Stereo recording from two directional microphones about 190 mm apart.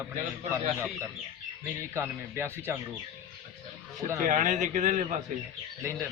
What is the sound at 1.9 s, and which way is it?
Speech, 15° right (ahead or behind).